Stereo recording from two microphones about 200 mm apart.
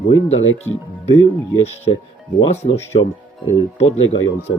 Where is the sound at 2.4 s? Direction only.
35° left (ahead or behind).